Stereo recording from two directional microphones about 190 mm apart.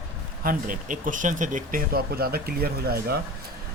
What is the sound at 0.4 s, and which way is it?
Speech, 45° right (ahead or behind).